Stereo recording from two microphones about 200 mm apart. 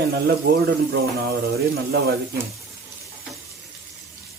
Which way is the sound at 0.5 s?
45° right (ahead or behind).